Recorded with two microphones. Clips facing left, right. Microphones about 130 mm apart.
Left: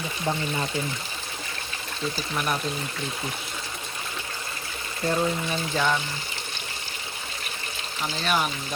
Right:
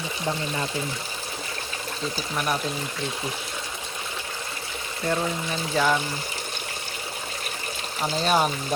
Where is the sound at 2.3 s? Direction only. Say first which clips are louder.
Right 2 dB; centre (ahead or behind).